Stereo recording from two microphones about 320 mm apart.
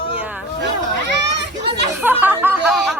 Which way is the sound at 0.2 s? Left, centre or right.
Centre.